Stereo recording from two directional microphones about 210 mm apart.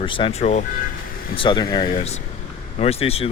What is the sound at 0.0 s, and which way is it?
Speech, 25° left (ahead or behind).